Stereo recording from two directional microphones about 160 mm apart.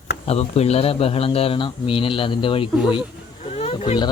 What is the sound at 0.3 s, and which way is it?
A man's voice, 40° left (ahead or behind).